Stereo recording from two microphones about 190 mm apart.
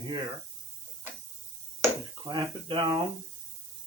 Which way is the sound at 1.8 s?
20° right (ahead or behind).